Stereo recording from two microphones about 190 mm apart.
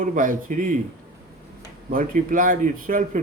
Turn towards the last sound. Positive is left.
turn(degrees=-45)  # may be behind; listen again after turning